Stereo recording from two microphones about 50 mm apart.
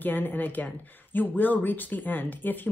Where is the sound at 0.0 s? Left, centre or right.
Left.